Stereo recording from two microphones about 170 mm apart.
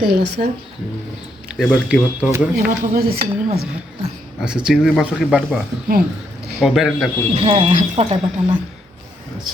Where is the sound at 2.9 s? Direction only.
65° right (ahead or behind).